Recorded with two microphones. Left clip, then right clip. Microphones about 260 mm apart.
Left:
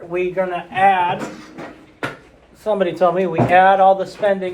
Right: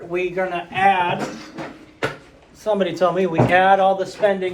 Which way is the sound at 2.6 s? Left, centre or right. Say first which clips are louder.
Left 2 dB; left.